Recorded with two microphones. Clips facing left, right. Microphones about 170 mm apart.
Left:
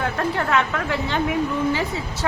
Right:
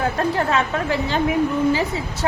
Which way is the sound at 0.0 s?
20° right (ahead or behind).